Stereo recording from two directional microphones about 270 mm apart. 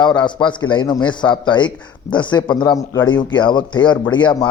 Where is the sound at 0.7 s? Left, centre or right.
Centre.